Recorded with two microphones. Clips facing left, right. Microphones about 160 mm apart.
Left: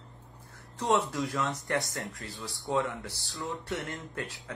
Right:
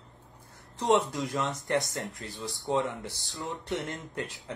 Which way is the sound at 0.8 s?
20° right (ahead or behind).